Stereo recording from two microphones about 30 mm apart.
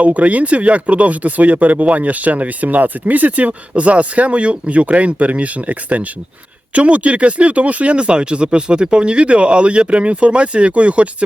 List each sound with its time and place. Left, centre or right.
0.0 s speech: right
7.9 s speech: right